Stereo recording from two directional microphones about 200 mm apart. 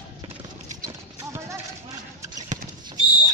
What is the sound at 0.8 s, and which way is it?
Clip-clop, 15° right (ahead or behind).